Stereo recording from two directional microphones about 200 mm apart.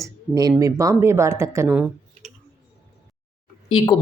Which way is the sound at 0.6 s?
15° right (ahead or behind).